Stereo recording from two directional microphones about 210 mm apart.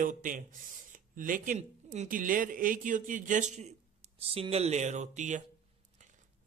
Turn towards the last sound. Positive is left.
turn(degrees=-35)  # may be behind; listen again after turning